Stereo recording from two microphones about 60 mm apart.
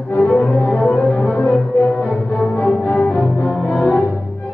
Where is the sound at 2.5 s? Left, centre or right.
Left.